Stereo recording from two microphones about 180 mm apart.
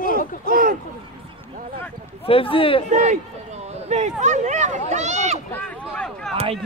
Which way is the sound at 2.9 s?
40° right (ahead or behind).